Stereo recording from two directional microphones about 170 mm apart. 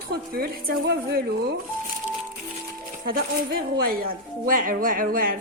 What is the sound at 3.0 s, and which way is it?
Speech, 60° right (ahead or behind).